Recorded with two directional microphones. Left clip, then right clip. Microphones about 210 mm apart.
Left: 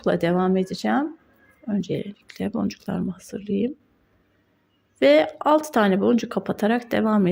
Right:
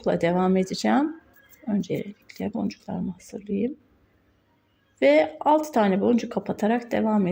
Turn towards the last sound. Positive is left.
turn(degrees=20)  # may be behind; listen again after turning